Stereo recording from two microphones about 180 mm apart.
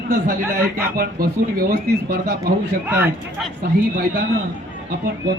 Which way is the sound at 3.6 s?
55° right (ahead or behind).